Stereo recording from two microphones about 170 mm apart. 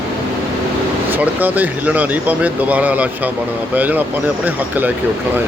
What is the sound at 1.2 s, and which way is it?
Speech, 10° right (ahead or behind).